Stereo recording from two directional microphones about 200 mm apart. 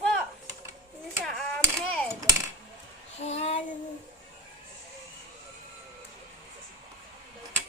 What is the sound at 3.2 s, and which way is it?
Child singing, 30° left (ahead or behind).